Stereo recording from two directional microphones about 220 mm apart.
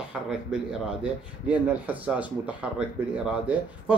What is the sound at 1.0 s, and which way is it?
Speech, 5° right (ahead or behind).